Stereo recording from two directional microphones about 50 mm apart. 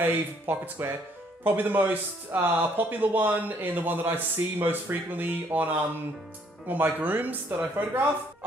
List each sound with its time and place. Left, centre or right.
0.0 s speech: right
2.3 s speech: right
2.8 s speech: right